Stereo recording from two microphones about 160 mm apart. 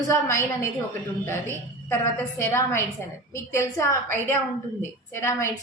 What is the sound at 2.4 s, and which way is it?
A woman's voice, 15° left (ahead or behind).